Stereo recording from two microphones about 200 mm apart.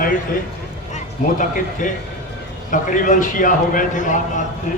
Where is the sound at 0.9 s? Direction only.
40° left (ahead or behind).